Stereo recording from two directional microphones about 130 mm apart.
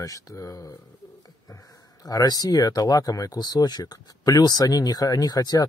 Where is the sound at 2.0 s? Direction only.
30° left (ahead or behind).